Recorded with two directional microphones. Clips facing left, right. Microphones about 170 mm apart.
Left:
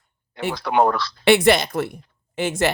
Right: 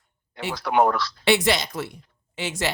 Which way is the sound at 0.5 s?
30° left (ahead or behind).